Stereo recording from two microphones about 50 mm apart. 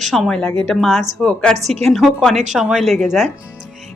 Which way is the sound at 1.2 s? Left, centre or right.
Centre.